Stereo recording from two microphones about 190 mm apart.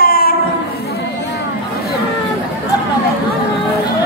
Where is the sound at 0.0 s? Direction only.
50° left (ahead or behind).